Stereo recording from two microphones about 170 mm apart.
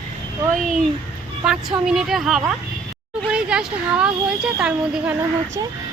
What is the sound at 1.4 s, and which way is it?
Speech, 5° right (ahead or behind).